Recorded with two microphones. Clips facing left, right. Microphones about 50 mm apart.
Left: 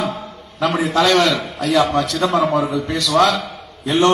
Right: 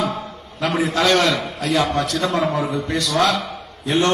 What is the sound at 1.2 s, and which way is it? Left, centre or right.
Speech, right.